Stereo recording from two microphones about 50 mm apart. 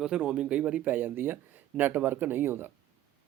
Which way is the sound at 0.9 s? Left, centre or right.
Right.